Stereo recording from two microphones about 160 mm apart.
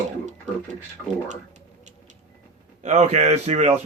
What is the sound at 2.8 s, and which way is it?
Speech, 45° right (ahead or behind).